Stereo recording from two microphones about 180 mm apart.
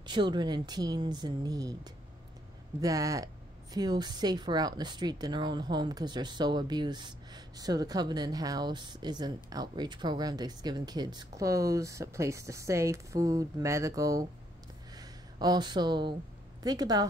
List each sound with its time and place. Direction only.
0.0 s speech: 25° right (ahead or behind)